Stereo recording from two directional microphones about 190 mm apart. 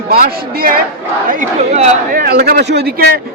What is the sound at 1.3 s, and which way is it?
Speech, 40° right (ahead or behind).